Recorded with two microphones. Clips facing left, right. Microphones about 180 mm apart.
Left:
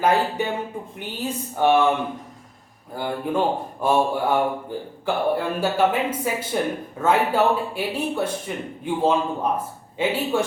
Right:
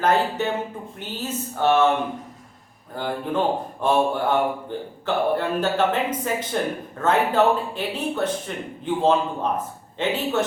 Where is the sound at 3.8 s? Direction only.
10° left (ahead or behind).